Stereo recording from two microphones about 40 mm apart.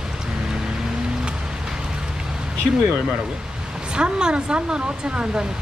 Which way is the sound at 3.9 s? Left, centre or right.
Right.